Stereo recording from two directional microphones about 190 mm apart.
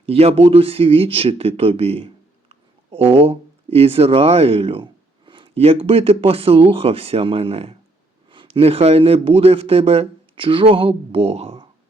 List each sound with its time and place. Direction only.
0.0 s a man's voice: 30° right (ahead or behind)